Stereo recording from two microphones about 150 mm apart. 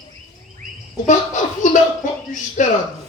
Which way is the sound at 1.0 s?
55° left (ahead or behind).